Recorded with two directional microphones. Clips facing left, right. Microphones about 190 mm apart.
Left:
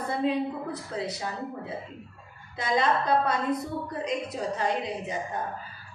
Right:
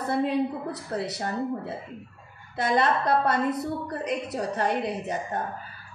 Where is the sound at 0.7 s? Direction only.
65° right (ahead or behind).